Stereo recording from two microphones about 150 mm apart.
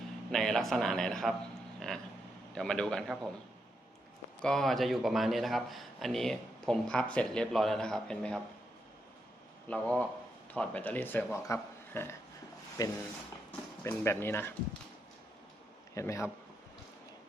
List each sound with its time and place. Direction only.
0.3 s a man's voice: 5° left (ahead or behind)
2.6 s a man's voice: 5° left (ahead or behind)
4.4 s a man's voice: centre (ahead or behind)
9.6 s a man's voice: 10° left (ahead or behind)
16.0 s a man's voice: 20° left (ahead or behind)